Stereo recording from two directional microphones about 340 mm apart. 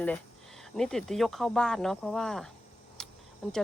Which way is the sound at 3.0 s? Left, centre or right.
Centre.